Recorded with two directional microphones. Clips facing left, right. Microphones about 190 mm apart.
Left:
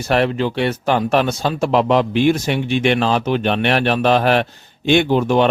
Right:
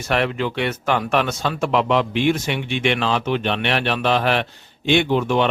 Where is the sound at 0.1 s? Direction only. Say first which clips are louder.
Left 4 dB; 35° left (ahead or behind).